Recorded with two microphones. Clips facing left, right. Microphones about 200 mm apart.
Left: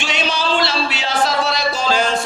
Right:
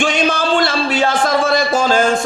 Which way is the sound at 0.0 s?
50° right (ahead or behind).